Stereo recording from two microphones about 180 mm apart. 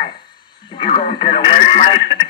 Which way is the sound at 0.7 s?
25° left (ahead or behind).